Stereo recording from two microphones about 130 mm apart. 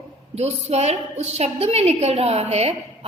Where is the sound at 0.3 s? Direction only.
55° right (ahead or behind).